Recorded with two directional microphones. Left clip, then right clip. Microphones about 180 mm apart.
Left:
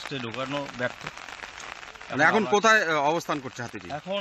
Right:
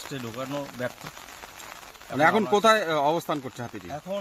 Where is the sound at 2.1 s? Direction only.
5° right (ahead or behind).